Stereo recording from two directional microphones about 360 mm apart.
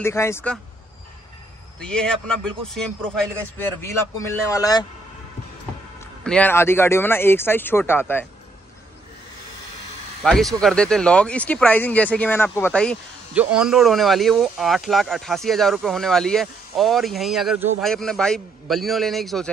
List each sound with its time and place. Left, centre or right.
0.0 s speech: centre
1.8 s speech: centre
5.9 s speech: centre
10.2 s speech: centre